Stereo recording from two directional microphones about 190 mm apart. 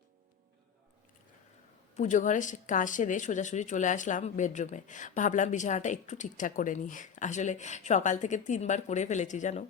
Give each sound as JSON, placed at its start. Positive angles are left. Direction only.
{"t": 2.0, "sound": "a woman's voice", "side_deg": 40}